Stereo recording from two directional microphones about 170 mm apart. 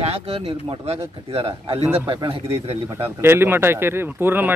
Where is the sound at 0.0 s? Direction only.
40° right (ahead or behind).